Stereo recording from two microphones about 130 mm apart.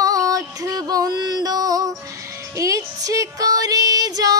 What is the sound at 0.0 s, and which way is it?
Music, 25° right (ahead or behind).